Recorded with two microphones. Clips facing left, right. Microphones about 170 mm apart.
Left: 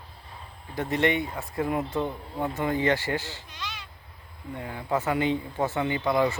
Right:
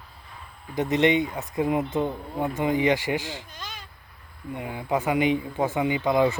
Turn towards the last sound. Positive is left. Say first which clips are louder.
# right 3 dB
turn(degrees=-20)  # may be behind; listen again after turning